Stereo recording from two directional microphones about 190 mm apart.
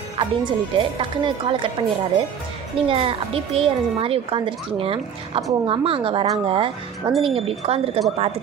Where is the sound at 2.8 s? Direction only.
30° right (ahead or behind).